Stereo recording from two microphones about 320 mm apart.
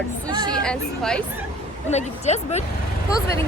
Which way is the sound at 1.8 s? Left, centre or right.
Left.